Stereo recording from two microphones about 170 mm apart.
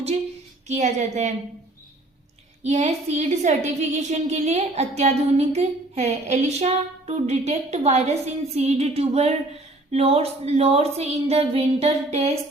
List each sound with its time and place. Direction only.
0.7 s a woman's voice: 45° right (ahead or behind)
2.6 s a woman's voice: 40° right (ahead or behind)